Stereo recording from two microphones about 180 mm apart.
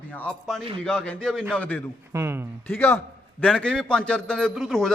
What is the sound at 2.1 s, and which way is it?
Speech, 15° right (ahead or behind).